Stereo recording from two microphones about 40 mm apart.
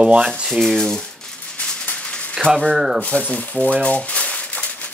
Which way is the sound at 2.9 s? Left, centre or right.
Left.